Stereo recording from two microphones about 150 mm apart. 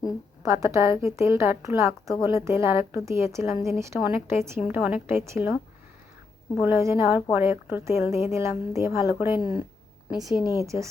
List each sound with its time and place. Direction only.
0.4 s a woman's voice: 20° right (ahead or behind)
6.6 s a woman's voice: 15° right (ahead or behind)
9.4 s speech: 35° left (ahead or behind)
10.1 s a woman's voice: centre (ahead or behind)
10.5 s a woman's voice: 20° right (ahead or behind)